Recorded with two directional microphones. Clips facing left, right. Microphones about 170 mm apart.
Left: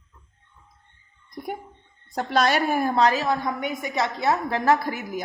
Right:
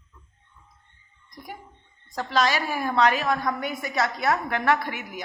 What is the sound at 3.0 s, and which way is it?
A woman's voice, 35° left (ahead or behind).